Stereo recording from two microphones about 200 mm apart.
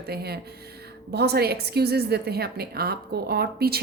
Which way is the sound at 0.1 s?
50° right (ahead or behind).